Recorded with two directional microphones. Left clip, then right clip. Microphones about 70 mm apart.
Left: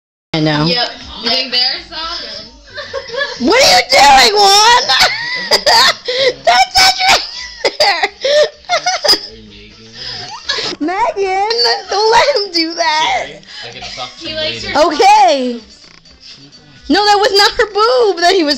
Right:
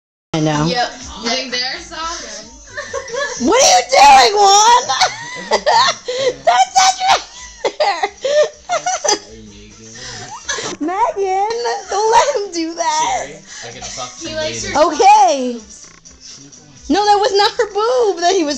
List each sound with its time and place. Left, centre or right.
0.3 s a sound: left
0.7 s speech: centre
3.5 s speech: left
4.3 s a woman's voice: left
4.6 s crying: left
10.5 s giggle: left
11.2 s speech: left
11.5 s a woman's voice: left
13.3 s speech: centre
14.7 s a woman's voice: left
16.8 s a woman's voice: left